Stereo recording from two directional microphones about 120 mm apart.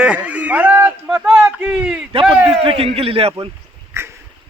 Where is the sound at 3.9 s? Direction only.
20° right (ahead or behind).